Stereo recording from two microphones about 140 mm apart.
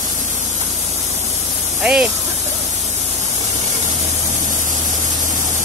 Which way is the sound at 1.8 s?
5° right (ahead or behind).